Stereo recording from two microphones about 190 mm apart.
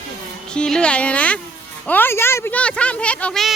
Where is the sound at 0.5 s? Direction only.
5° left (ahead or behind).